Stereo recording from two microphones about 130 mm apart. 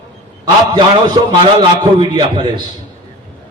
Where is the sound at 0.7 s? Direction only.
35° right (ahead or behind).